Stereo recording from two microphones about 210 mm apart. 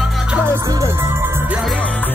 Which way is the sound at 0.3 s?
15° right (ahead or behind).